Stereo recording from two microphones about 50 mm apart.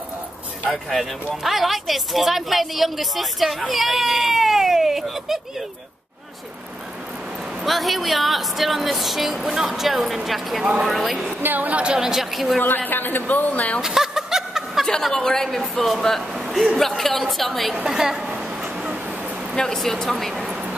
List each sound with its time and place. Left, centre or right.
0.8 s speech: centre
7.6 s speech: centre
11.4 s a woman's voice: right
11.7 s speech: centre
12.6 s speech: left
13.7 s snicker: centre
14.9 s speech: centre
16.3 s speech: centre
17.8 s a sound: centre
19.5 s speech: centre